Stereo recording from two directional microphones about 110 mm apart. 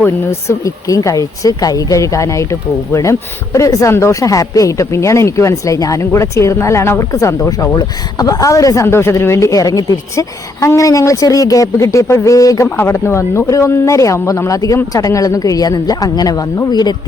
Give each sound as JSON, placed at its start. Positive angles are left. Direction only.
{"t": 0.0, "sound": "speech", "side_deg": 25}
{"t": 12.6, "sound": "speech", "side_deg": 20}